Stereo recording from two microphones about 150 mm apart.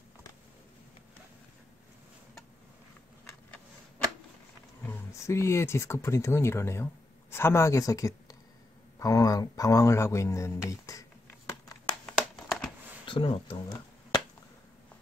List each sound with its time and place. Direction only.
4.8 s speech: 20° left (ahead or behind)
12.1 s a sound: centre (ahead or behind)
13.0 s speech: 35° left (ahead or behind)
13.7 s finger snapping: 25° left (ahead or behind)